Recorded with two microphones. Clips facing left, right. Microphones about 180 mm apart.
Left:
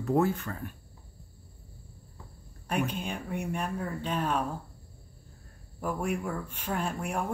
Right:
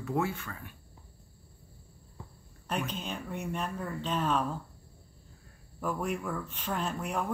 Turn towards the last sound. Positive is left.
turn(degrees=10)  # may be behind; listen again after turning